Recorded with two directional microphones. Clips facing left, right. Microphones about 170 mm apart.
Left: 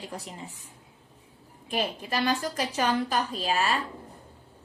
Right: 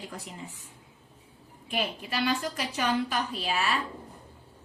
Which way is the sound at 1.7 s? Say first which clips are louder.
Left 2 dB; 40° left (ahead or behind).